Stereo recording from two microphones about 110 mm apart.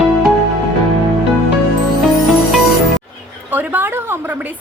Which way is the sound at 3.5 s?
15° right (ahead or behind).